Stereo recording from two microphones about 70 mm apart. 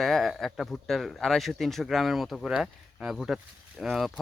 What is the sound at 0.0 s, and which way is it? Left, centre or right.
Speech, centre.